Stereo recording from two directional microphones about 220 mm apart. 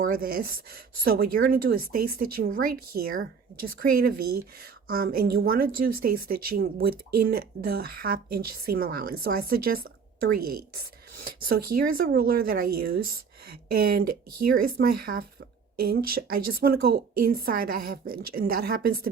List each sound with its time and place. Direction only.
0.1 s a woman's voice: 40° right (ahead or behind)